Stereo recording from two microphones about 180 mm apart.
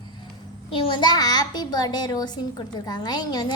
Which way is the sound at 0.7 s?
30° left (ahead or behind).